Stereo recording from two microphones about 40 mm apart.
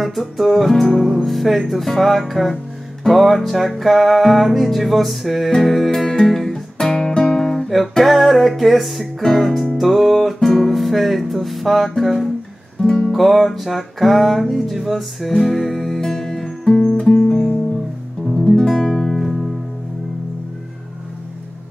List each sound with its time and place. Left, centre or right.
0.0 s music: centre
6.0 s music: centre
6.9 s guitar: centre
7.4 s music: centre
12.8 s music: left
13.1 s music: centre
18.5 s guitar: centre
19.1 s music: centre